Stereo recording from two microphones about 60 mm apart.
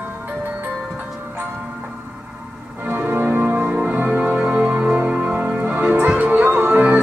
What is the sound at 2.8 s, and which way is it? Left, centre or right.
Organ, right.